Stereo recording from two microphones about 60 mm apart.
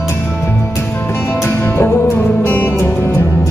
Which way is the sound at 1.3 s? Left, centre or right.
Left.